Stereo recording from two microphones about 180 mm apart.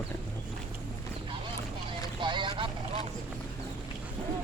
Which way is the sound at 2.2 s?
25° right (ahead or behind).